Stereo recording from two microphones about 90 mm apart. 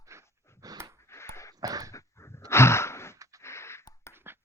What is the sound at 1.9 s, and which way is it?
Dog, 35° left (ahead or behind).